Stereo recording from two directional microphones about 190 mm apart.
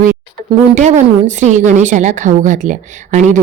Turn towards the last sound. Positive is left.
turn(degrees=-40)  # may be behind; listen again after turning